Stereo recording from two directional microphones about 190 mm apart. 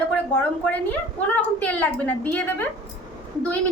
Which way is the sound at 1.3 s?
10° left (ahead or behind).